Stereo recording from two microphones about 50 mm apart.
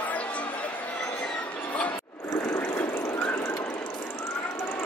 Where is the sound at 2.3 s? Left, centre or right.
Left.